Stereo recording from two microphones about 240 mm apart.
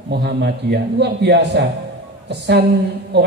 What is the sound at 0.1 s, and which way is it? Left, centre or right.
A man's voice, right.